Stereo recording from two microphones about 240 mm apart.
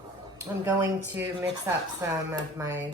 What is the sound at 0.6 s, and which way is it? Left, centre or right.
Speech, centre.